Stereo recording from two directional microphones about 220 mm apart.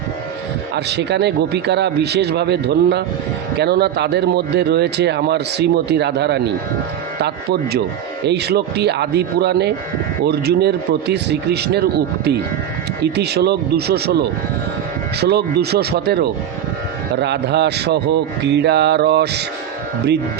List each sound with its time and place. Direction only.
0.9 s speech: 50° right (ahead or behind)